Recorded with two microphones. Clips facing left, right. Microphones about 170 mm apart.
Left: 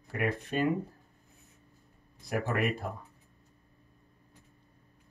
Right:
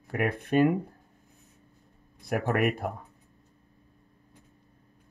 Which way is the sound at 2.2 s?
55° right (ahead or behind).